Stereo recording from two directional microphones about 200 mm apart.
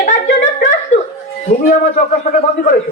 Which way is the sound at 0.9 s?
35° left (ahead or behind).